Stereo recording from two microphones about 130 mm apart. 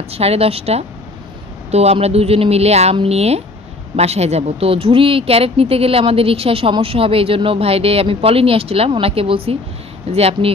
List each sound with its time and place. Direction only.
0.1 s speech: 50° right (ahead or behind)